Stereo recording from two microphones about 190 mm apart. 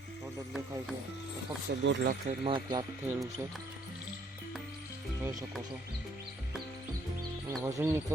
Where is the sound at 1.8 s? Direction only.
70° right (ahead or behind).